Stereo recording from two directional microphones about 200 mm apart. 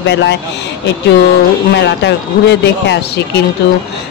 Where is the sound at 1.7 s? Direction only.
60° left (ahead or behind).